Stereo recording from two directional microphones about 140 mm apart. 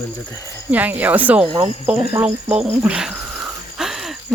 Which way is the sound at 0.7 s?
10° right (ahead or behind).